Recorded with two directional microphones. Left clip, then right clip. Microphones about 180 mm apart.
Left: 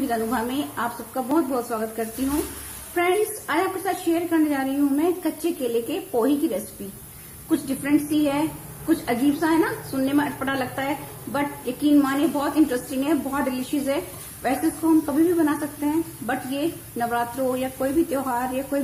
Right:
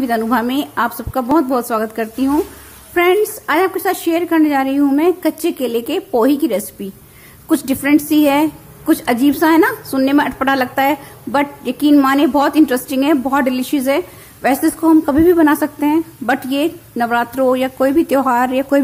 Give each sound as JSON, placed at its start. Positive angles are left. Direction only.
{"t": 0.1, "sound": "a woman's voice", "side_deg": -55}